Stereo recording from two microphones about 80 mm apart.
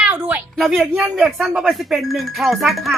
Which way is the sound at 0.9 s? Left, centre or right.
Centre.